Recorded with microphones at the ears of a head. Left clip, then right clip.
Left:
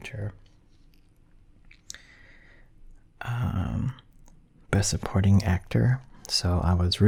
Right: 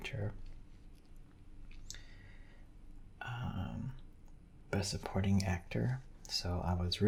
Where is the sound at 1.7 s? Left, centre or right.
Left.